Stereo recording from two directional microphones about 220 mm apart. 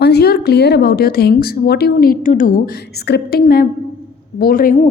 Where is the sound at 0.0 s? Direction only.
50° left (ahead or behind).